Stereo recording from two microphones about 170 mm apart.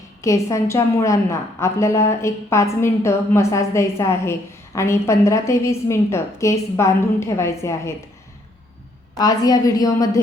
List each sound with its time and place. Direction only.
0.2 s a woman's voice: 15° left (ahead or behind)
9.1 s a woman's voice: 20° left (ahead or behind)